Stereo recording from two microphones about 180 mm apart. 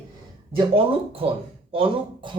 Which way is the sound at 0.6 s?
30° right (ahead or behind).